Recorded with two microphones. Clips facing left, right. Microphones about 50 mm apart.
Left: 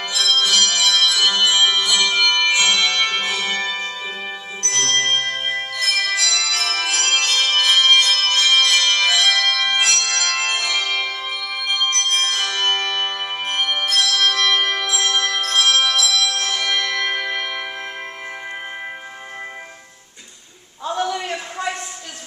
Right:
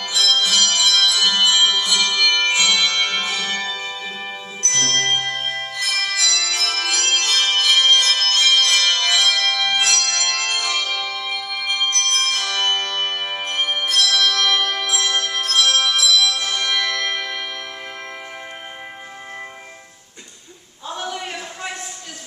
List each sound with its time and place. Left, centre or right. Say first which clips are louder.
0.1 s music: even; centre
4.6 s music: even; centre
5.9 s music: left 1 dB; centre
9.4 s music: left 1 dB; left
11.0 s bell: left 2 dB; left
11.2 s music: even; centre
20.9 s a sound: left 6 dB; left